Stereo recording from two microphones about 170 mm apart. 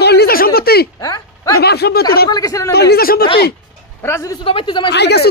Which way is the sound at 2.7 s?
70° left (ahead or behind).